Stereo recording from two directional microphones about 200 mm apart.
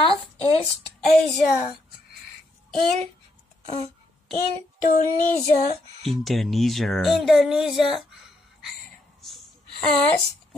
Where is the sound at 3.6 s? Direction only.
35° left (ahead or behind).